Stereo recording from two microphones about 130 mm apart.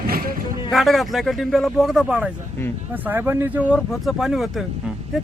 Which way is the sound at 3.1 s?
20° right (ahead or behind).